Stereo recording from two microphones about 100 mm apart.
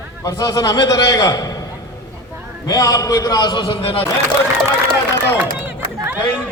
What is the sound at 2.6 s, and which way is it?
A man's voice, 35° left (ahead or behind).